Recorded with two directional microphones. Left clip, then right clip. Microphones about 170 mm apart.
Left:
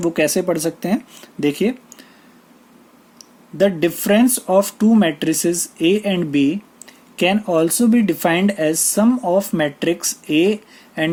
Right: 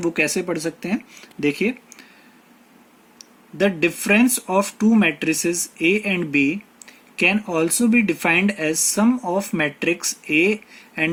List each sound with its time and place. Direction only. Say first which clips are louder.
0.0 s speech: left 4 dB; 35° left (ahead or behind)
3.2 s speech: left 5 dB; 30° left (ahead or behind)